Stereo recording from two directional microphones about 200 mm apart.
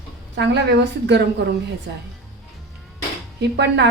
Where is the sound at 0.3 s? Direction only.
60° right (ahead or behind).